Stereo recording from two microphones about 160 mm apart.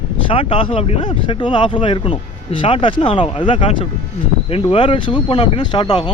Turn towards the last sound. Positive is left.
turn(degrees=30)  # may be behind; listen again after turning